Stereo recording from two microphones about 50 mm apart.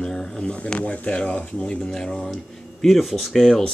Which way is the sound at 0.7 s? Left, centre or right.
Left.